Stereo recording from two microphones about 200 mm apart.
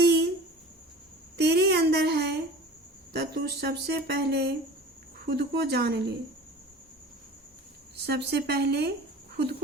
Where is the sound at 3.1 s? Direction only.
55° right (ahead or behind).